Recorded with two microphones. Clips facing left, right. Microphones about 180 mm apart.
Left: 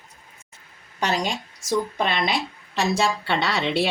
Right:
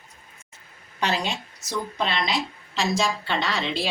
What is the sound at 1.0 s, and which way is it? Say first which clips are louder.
A woman's voice: left 2 dB; 45° left (ahead or behind).